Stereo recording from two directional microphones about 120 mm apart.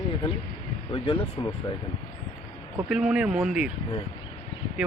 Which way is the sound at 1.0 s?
45° left (ahead or behind).